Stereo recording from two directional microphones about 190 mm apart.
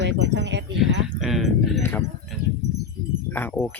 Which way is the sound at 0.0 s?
70° right (ahead or behind).